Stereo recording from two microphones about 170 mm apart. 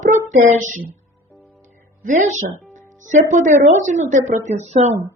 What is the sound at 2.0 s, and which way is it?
Speech, 45° right (ahead or behind).